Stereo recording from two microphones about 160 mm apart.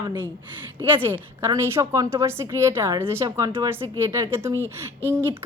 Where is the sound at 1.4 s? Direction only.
15° right (ahead or behind).